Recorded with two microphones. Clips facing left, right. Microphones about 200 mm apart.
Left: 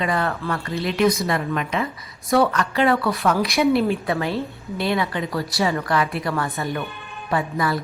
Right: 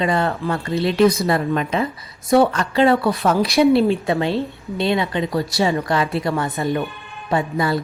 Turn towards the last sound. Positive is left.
turn(degrees=-25)  # may be behind; listen again after turning